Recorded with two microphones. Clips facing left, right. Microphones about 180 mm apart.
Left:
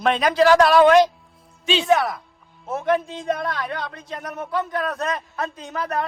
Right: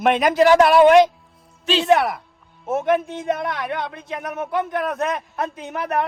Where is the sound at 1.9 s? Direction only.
60° right (ahead or behind).